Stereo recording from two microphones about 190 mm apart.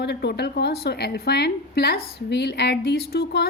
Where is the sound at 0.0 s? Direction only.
60° left (ahead or behind).